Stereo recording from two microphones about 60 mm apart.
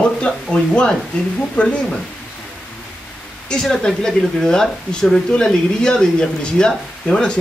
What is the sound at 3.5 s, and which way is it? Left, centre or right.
Speech, centre.